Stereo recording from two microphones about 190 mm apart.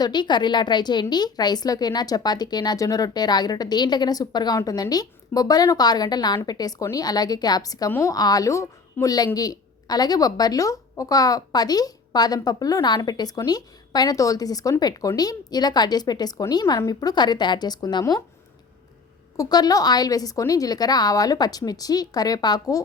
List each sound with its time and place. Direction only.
0.0 s a woman's voice: 25° left (ahead or behind)
19.4 s a woman's voice: 20° left (ahead or behind)